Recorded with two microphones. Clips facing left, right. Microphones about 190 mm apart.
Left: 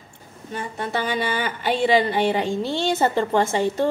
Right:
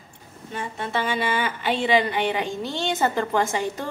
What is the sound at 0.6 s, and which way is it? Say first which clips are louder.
Speech: left 1 dB; 40° left (ahead or behind).